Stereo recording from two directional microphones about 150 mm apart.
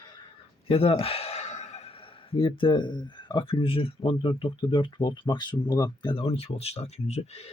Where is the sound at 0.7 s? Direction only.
40° left (ahead or behind).